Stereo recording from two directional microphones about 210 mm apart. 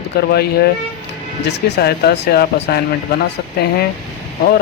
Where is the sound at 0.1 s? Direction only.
50° left (ahead or behind).